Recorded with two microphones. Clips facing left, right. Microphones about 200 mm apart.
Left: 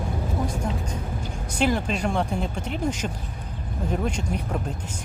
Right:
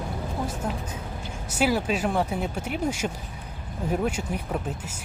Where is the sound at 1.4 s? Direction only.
5° right (ahead or behind).